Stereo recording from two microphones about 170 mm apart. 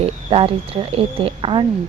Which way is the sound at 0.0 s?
35° right (ahead or behind).